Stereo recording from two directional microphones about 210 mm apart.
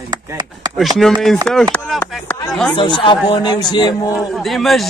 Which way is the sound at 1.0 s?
Centre (ahead or behind).